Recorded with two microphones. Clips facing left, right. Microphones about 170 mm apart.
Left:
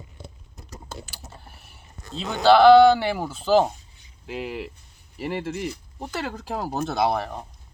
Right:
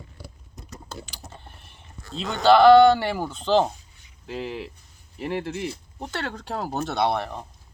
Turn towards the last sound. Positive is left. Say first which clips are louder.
# left 1 dB
turn(degrees=0)  # may be behind; listen again after turning